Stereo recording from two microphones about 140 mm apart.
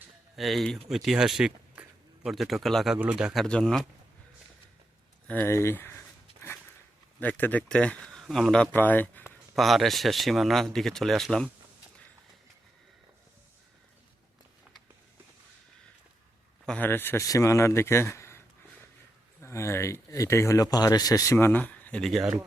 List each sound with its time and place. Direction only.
0.3 s speech: centre (ahead or behind)
3.4 s speech: 5° left (ahead or behind)
5.3 s speech: 15° left (ahead or behind)
7.2 s speech: 10° left (ahead or behind)
9.6 s speech: centre (ahead or behind)
16.6 s speech: 10° left (ahead or behind)